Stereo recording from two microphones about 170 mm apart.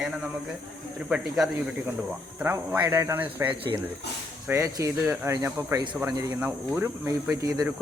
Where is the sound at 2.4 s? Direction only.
15° right (ahead or behind).